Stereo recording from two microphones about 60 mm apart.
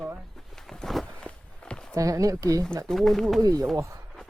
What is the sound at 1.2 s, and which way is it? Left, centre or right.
Walk, centre.